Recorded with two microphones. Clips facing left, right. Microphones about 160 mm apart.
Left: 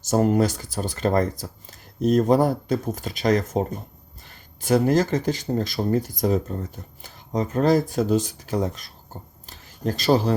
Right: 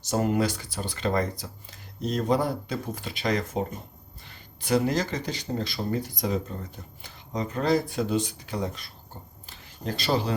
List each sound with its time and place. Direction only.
0.0 s speech: 45° left (ahead or behind)
4.6 s speech: 50° left (ahead or behind)
9.5 s a sound: 45° left (ahead or behind)